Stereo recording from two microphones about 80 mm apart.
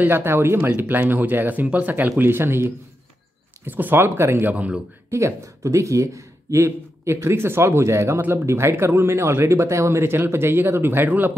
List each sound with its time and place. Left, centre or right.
0.0 s speech: right
4.5 s speech: centre
5.1 s speech: right